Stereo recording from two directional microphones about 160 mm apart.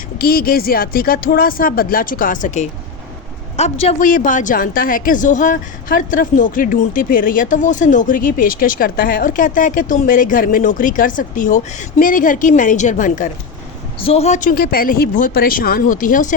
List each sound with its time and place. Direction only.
0.2 s speech: 70° left (ahead or behind); by 2.6 s 50° left (ahead or behind)
3.6 s speech: 40° left (ahead or behind)
4.0 s speech: 55° left (ahead or behind)
14.0 s speech: 40° left (ahead or behind); by 16.3 s 55° left (ahead or behind)